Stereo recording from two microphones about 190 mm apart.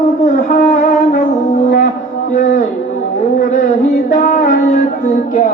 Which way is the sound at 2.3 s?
40° left (ahead or behind).